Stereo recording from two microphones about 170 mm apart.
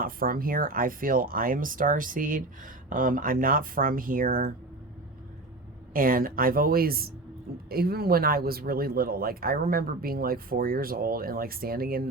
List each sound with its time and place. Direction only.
0.0 s speech: 60° right (ahead or behind)
5.9 s speech: 55° right (ahead or behind)